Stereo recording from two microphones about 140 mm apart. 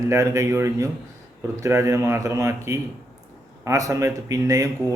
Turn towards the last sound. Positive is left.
turn(degrees=-25)  # may be behind; listen again after turning